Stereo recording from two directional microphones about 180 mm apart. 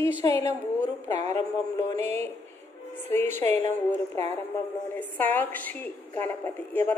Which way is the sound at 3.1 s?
10° left (ahead or behind).